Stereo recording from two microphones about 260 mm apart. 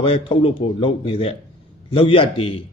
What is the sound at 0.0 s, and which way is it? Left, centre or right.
A man's voice, left.